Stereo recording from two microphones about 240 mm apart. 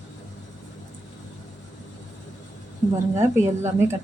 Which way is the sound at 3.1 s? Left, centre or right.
Centre.